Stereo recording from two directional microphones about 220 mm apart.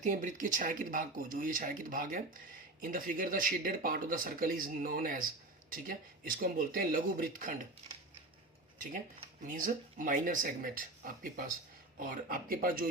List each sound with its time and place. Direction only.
0.0 s speech: 35° right (ahead or behind)
9.4 s speech: 35° right (ahead or behind)